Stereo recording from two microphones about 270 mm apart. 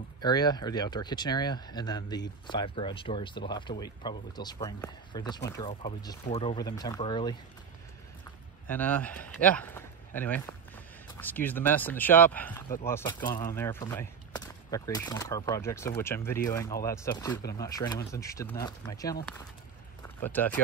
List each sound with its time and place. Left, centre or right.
0.2 s speech: centre
8.6 s speech: centre
20.2 s speech: centre